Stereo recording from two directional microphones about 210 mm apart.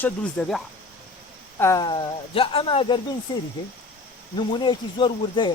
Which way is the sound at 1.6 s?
15° left (ahead or behind).